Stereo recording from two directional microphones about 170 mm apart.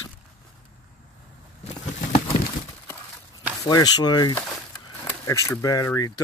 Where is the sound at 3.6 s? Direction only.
20° left (ahead or behind).